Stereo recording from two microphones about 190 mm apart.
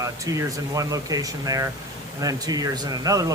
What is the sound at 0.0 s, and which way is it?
Speech, 15° right (ahead or behind).